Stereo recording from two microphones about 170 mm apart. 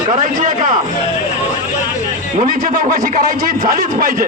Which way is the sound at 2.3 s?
50° right (ahead or behind).